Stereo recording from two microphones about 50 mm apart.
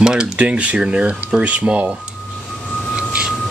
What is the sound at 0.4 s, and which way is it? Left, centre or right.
Speech, right.